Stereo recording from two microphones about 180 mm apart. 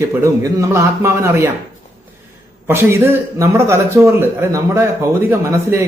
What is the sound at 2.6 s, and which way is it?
A man's voice, 15° right (ahead or behind).